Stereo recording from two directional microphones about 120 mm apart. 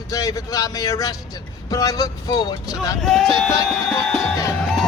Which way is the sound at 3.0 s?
Centre (ahead or behind).